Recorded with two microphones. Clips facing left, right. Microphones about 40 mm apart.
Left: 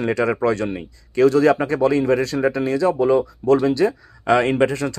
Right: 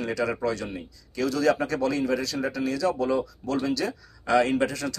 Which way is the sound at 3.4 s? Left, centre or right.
Left.